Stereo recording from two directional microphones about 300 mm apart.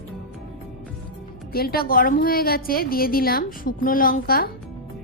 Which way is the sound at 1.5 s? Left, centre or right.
Left.